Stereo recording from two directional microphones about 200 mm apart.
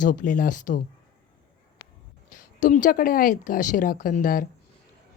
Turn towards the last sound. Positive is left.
turn(degrees=45)  # may be behind; listen again after turning